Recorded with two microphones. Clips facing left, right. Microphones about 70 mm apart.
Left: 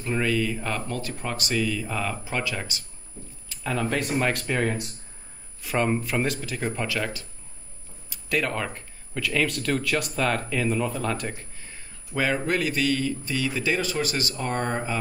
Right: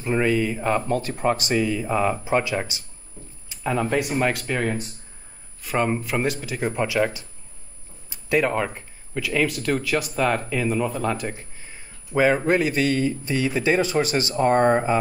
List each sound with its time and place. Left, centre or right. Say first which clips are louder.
0.0 s speech: right 4 dB; right